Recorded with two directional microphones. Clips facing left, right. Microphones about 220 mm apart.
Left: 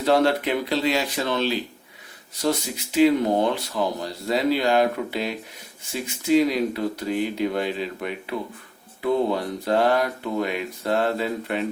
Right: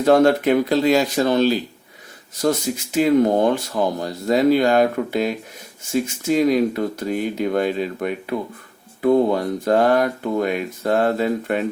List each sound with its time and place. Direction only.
0.0 s speech: 45° right (ahead or behind)